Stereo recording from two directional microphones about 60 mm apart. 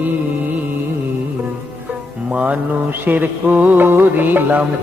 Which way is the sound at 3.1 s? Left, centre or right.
Right.